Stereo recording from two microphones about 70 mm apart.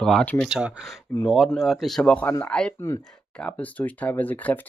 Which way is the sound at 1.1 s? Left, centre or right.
Left.